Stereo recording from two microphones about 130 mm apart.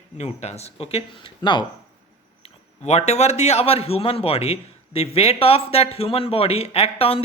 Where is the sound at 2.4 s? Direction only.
55° left (ahead or behind).